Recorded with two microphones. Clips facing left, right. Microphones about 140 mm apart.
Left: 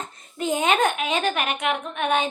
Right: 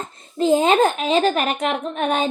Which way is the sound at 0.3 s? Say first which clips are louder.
Right 6 dB; 30° right (ahead or behind).